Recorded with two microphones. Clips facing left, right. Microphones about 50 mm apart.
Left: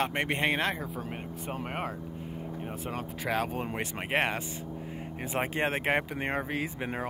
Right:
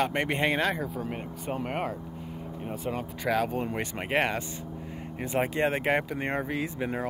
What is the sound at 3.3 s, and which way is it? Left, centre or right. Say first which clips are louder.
Speech: right 4 dB; centre.